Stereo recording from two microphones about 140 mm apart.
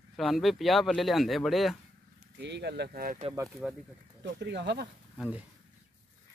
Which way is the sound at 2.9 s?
90° right.